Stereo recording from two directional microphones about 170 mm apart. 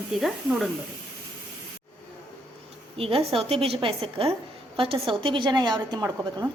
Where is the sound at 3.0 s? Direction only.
35° right (ahead or behind).